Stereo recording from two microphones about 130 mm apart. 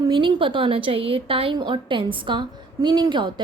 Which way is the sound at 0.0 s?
40° right (ahead or behind).